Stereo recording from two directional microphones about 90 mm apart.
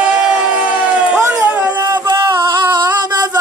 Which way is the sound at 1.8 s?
45° right (ahead or behind).